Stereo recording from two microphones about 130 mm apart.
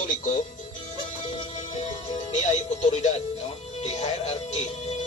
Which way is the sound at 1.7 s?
60° left (ahead or behind).